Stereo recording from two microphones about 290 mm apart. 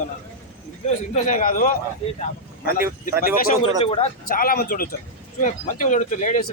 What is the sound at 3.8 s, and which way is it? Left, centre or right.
Speech, centre.